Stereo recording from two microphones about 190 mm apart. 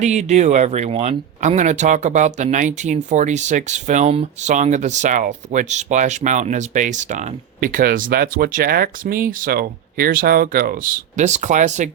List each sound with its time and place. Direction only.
0.0 s speech: 35° right (ahead or behind)